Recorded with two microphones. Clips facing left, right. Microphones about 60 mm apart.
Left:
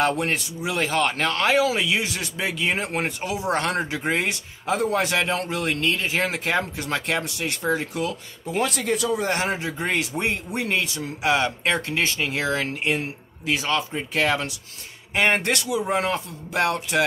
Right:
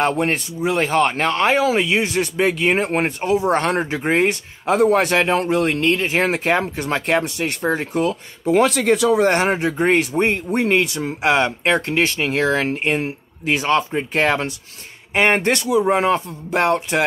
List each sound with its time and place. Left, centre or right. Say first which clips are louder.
0.0 s speech: right 4 dB; right
4.9 s speech: right 6 dB; right
5.2 s speech: right 7 dB; right
8.5 s speech: right 9 dB; right
9.3 s speech: right 7 dB; right
9.8 s speech: right 8 dB; right
11.2 s speech: right 4 dB; right
12.6 s speech: right 5 dB; right